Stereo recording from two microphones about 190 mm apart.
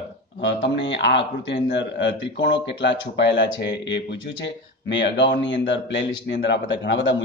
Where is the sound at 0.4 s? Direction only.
70° left (ahead or behind).